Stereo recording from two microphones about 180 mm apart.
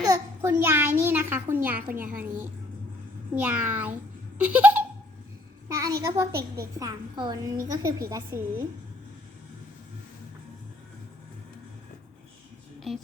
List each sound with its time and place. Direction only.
0.0 s a child's voice: 15° right (ahead or behind)
1.9 s a woman's voice: 50° right (ahead or behind)
3.3 s a woman's voice: 10° right (ahead or behind)